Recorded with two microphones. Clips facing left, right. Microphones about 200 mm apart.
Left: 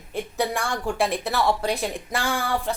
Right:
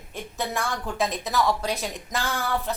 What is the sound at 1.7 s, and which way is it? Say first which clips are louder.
Speech: left 3 dB; 10° left (ahead or behind).